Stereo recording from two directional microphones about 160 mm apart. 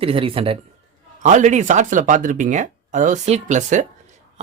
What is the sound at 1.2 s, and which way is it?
Speech, 50° right (ahead or behind).